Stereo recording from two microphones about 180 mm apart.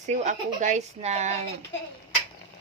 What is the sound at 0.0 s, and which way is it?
Speech, 40° right (ahead or behind).